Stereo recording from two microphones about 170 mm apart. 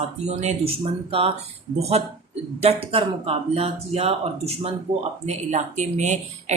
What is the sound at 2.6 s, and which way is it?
Speech, 35° right (ahead or behind).